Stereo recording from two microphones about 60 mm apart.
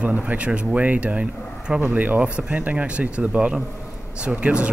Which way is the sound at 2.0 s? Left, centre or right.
Right.